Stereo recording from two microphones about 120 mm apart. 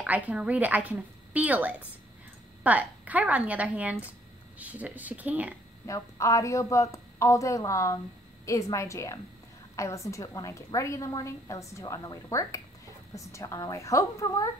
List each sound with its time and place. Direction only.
0.0 s a woman's voice: 10° right (ahead or behind)
5.9 s a woman's voice: 25° left (ahead or behind)